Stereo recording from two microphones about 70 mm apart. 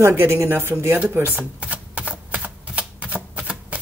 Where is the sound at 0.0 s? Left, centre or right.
Right.